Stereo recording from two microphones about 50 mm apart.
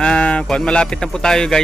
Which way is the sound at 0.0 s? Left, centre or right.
Left.